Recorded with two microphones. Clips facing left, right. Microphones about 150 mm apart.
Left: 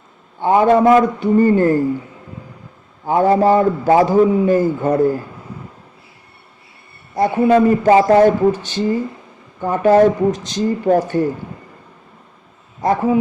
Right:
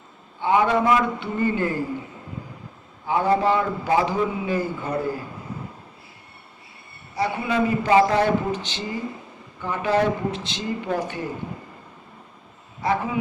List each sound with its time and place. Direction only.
0.3 s a man's voice: 45° left (ahead or behind)
3.1 s a man's voice: 45° left (ahead or behind)
7.2 s a man's voice: 45° left (ahead or behind)
12.8 s a man's voice: 45° left (ahead or behind)